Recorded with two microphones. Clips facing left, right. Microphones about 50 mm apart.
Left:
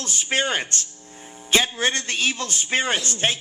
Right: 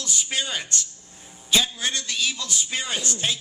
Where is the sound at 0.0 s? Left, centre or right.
Left.